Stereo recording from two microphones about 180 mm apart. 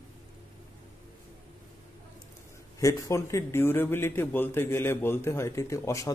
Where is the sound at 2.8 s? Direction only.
15° left (ahead or behind).